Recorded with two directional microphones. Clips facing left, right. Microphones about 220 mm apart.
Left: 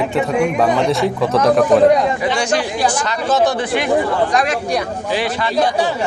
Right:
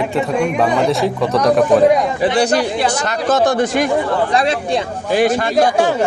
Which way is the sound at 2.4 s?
35° right (ahead or behind).